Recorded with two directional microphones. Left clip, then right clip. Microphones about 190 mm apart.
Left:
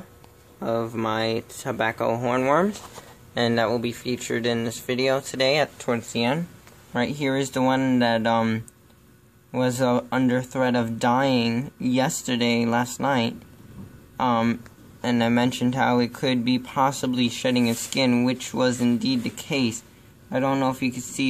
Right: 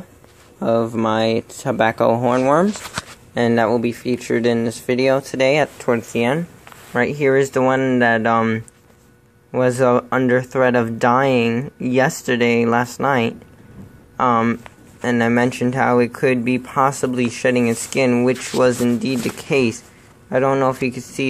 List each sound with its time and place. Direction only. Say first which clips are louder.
0.6 s speech: right 8 dB; 20° right (ahead or behind)
2.1 s speech: right 6 dB; 10° right (ahead or behind)